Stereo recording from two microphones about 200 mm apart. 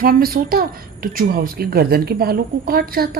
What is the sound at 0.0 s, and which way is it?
Speech, 45° right (ahead or behind).